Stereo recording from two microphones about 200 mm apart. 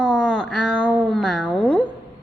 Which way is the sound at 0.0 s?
5° left (ahead or behind).